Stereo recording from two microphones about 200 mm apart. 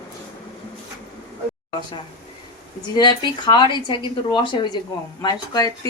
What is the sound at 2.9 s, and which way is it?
A woman's voice, 20° left (ahead or behind).